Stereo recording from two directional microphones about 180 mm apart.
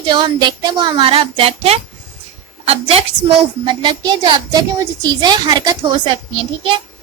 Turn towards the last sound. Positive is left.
turn(degrees=-30)  # may be behind; listen again after turning